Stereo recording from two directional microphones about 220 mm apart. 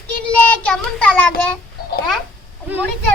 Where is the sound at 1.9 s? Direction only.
45° left (ahead or behind).